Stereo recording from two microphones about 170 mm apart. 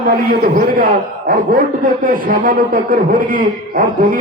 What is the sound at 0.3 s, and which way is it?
Speech, 55° right (ahead or behind).